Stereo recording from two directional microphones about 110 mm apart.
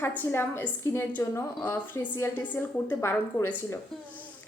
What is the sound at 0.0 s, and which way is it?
A woman's voice, 20° left (ahead or behind).